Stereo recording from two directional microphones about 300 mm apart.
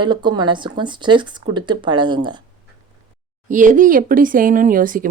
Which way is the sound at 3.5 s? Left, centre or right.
Right.